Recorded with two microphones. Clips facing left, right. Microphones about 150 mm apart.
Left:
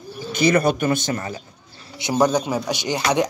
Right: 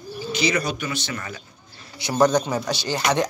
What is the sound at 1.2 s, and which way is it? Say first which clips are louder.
Speech: left 5 dB; 30° left (ahead or behind).